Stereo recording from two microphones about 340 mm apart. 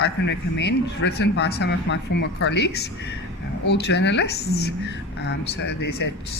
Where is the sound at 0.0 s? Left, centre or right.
Left.